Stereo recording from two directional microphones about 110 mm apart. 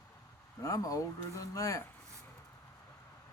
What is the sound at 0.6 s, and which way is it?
Speech, 30° left (ahead or behind).